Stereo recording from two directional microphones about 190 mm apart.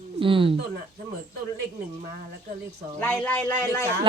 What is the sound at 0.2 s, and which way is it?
Speech, 25° right (ahead or behind).